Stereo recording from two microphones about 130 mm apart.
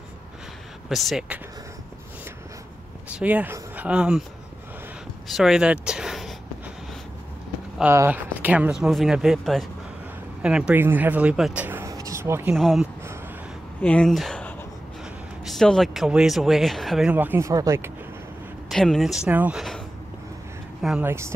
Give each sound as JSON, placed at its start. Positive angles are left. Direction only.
{"t": 0.8, "sound": "speech", "side_deg": 0}
{"t": 3.1, "sound": "speech", "side_deg": -10}
{"t": 5.3, "sound": "speech", "side_deg": -5}
{"t": 7.8, "sound": "speech", "side_deg": -15}
{"t": 11.6, "sound": "a sound", "side_deg": -20}
{"t": 12.5, "sound": "speech", "side_deg": 0}
{"t": 15.4, "sound": "speech", "side_deg": 5}
{"t": 17.5, "sound": "speech", "side_deg": -25}
{"t": 18.7, "sound": "speech", "side_deg": 0}
{"t": 21.0, "sound": "speech", "side_deg": -20}